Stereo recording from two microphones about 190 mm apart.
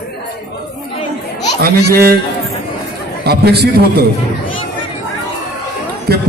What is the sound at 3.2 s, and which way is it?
Speech, 60° right (ahead or behind).